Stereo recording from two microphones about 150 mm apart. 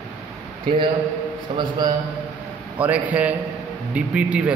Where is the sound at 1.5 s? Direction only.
40° right (ahead or behind).